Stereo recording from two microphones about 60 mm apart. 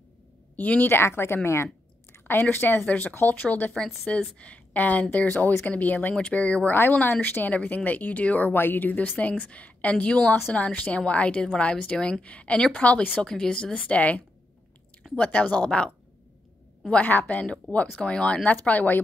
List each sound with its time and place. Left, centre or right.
0.6 s a woman's voice: left
2.1 s a sound: left
2.5 s a woman's voice: left
2.9 s a woman's voice: left
4.1 s a woman's voice: centre
16.9 s a woman's voice: left